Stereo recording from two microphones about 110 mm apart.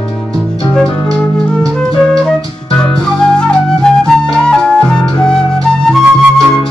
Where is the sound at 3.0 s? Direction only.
5° left (ahead or behind).